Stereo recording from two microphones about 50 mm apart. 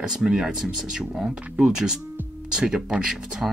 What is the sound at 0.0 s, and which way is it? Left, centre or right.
Speech, centre.